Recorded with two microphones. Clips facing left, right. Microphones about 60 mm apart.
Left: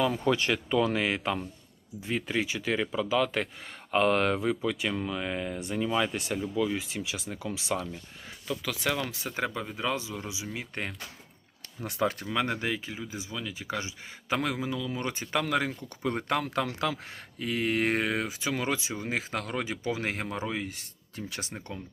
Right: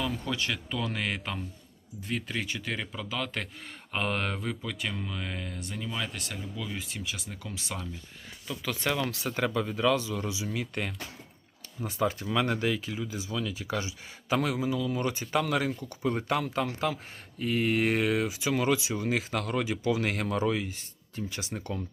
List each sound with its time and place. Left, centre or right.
0.3 s speech: left
0.8 s speech: centre
6.3 s speech: centre
9.0 s speech: centre
11.9 s speech: left
12.2 s speech: left
17.4 s speech: left
20.6 s speech: left